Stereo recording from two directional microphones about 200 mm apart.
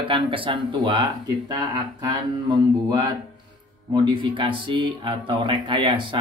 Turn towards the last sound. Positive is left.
turn(degrees=-25)  # may be behind; listen again after turning